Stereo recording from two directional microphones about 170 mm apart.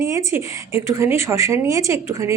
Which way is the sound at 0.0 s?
15° right (ahead or behind).